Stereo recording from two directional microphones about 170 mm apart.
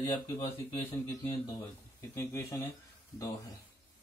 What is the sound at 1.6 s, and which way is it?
Speech, 15° left (ahead or behind).